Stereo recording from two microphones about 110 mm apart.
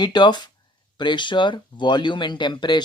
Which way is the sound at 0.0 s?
40° left (ahead or behind).